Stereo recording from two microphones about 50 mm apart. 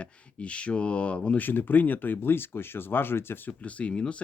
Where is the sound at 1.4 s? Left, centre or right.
Left.